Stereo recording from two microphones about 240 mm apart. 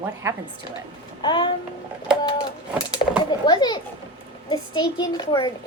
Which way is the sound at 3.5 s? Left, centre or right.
Centre.